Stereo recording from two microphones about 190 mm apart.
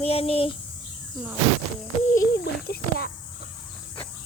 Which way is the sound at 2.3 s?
55° left (ahead or behind).